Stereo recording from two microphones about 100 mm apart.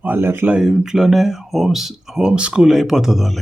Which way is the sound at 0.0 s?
20° right (ahead or behind).